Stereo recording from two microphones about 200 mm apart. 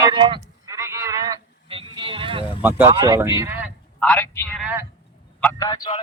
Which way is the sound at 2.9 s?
25° right (ahead or behind).